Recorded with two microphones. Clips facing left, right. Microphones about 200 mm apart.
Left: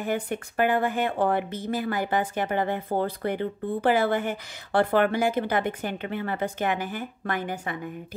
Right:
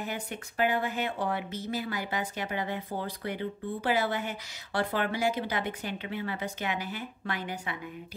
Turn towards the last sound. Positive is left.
turn(degrees=50)  # may be behind; listen again after turning